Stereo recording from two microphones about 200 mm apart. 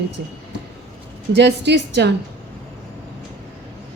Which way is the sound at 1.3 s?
60° right (ahead or behind).